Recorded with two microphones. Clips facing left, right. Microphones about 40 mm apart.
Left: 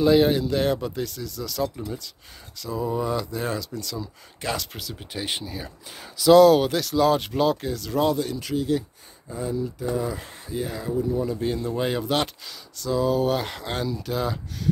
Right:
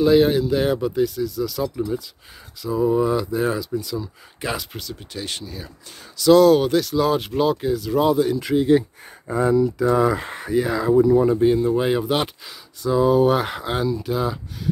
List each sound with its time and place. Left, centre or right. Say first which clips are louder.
0.0 s speech: right 3 dB; centre
5.1 s speech: left 1 dB; centre
8.5 s speech: right 8 dB; right
9.3 s speech: right 10 dB; right
10.2 s speech: right 9 dB; right
11.4 s speech: right 8 dB; centre